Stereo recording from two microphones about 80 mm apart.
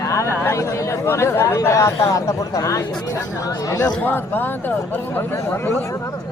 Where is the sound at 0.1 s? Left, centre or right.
Left.